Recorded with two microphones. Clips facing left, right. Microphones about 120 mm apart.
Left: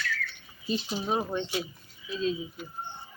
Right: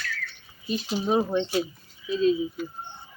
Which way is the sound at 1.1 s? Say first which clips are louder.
Right 6 dB; 10° right (ahead or behind).